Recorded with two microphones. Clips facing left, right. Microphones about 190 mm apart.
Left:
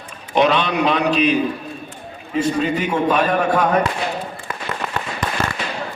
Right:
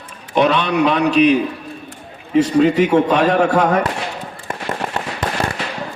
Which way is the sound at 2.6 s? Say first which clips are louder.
Right 6 dB; 80° right.